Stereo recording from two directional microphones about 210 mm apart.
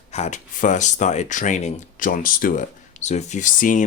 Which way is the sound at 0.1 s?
35° left (ahead or behind).